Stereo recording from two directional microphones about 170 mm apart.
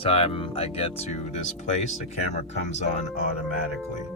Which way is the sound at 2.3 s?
40° left (ahead or behind).